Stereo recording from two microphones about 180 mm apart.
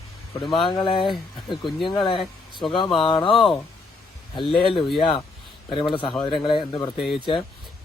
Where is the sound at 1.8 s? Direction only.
25° left (ahead or behind).